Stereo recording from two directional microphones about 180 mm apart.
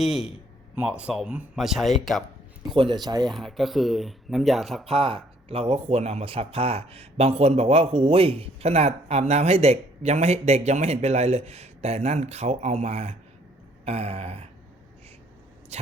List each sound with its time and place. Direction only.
0.0 s speech: centre (ahead or behind)
2.7 s speech: 25° right (ahead or behind)
3.2 s speech: centre (ahead or behind)
4.9 s speech: 30° right (ahead or behind)
15.7 s speech: 35° right (ahead or behind)